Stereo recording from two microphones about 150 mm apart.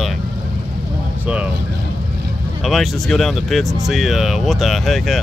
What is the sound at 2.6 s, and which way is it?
Speech, centre (ahead or behind).